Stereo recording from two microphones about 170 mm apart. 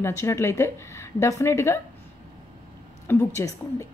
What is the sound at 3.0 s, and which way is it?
Speech, 20° left (ahead or behind).